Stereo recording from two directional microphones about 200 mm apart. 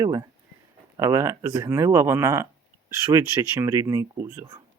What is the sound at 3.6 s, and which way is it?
Speech, 15° right (ahead or behind).